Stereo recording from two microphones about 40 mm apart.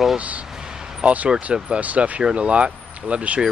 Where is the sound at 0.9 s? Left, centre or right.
Right.